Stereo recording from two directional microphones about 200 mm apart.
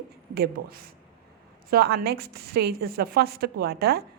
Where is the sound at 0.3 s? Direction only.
50° right (ahead or behind).